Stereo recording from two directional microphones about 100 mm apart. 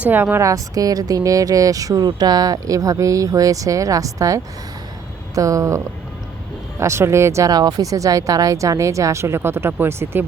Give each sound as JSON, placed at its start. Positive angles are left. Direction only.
{"t": 0.0, "sound": "a woman's voice", "side_deg": -20}
{"t": 0.4, "sound": "speech", "side_deg": -35}